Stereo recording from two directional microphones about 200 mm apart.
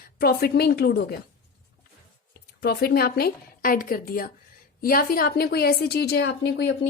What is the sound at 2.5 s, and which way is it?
A woman's voice, 50° left (ahead or behind).